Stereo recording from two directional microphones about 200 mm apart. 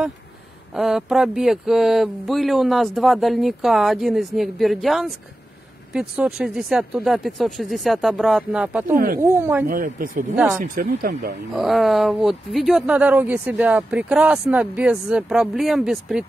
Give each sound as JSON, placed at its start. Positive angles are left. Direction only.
{"t": 0.7, "sound": "speech", "side_deg": 0}
{"t": 8.9, "sound": "speech", "side_deg": -45}
{"t": 9.2, "sound": "speech", "side_deg": -10}
{"t": 9.7, "sound": "speech", "side_deg": -45}
{"t": 10.3, "sound": "speech", "side_deg": -5}
{"t": 10.6, "sound": "speech", "side_deg": -45}
{"t": 11.5, "sound": "speech", "side_deg": 0}